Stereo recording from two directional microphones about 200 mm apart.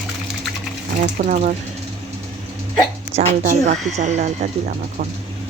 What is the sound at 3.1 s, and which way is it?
Speech, 40° right (ahead or behind).